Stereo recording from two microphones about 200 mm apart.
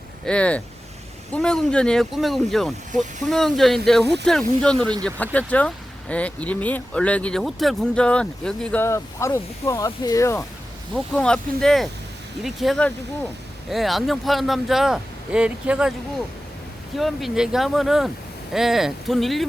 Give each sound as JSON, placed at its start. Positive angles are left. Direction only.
{"t": 0.3, "sound": "speech", "side_deg": 5}
{"t": 4.0, "sound": "speech", "side_deg": -60}
{"t": 4.3, "sound": "speech", "side_deg": 5}
{"t": 10.9, "sound": "speech", "side_deg": 5}